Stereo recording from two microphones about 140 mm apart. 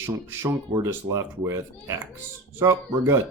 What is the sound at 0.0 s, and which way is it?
Speech, 20° right (ahead or behind).